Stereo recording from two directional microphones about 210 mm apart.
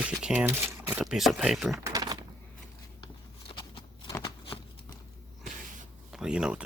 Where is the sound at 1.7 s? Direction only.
15° right (ahead or behind).